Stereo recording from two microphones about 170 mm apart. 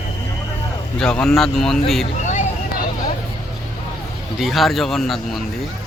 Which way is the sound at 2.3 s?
45° left (ahead or behind).